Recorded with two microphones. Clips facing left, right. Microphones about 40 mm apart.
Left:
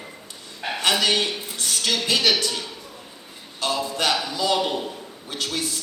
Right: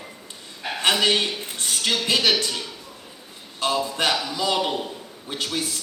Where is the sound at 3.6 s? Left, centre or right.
Right.